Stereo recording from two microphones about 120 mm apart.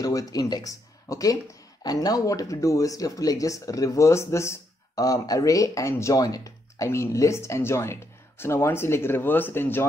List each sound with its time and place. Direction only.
0.0 s speech: 30° left (ahead or behind)